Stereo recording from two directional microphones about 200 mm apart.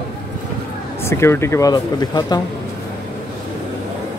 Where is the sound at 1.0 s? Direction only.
15° left (ahead or behind).